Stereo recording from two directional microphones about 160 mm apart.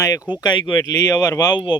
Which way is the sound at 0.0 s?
20° left (ahead or behind).